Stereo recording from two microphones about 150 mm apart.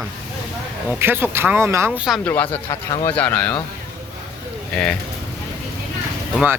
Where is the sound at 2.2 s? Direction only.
10° left (ahead or behind).